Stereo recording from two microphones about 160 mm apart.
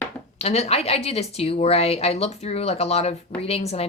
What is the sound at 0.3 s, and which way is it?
A woman's voice, 40° left (ahead or behind).